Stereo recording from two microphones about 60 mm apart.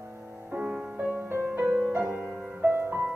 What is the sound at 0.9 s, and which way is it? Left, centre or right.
Music, right.